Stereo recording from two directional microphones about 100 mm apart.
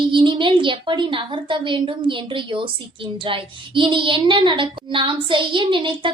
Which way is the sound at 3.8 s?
55° right (ahead or behind).